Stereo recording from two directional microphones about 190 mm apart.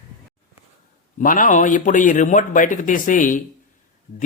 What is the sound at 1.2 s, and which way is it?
Speech, 45° left (ahead or behind).